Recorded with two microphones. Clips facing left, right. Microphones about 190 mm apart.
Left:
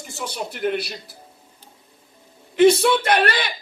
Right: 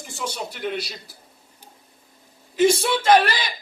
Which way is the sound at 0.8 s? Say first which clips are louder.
Left 2 dB; 60° left (ahead or behind).